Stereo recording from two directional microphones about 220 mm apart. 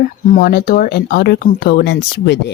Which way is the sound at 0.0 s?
45° left (ahead or behind).